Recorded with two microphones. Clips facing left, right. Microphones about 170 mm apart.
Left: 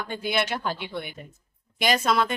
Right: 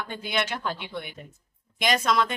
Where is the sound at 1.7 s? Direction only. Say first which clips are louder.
Left 1 dB; 5° left (ahead or behind).